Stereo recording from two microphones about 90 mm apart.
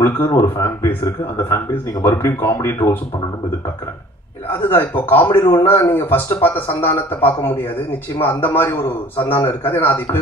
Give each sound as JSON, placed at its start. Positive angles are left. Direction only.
{"t": 0.0, "sound": "speech", "side_deg": 25}
{"t": 2.0, "sound": "speech", "side_deg": 30}
{"t": 4.5, "sound": "speech", "side_deg": 25}